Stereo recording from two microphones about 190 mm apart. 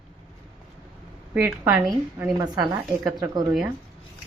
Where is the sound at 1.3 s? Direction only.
10° right (ahead or behind).